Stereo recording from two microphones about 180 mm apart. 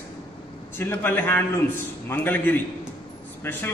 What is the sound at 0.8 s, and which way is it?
A man's voice, 10° left (ahead or behind).